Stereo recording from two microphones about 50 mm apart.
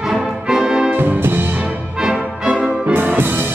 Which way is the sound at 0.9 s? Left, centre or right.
Right.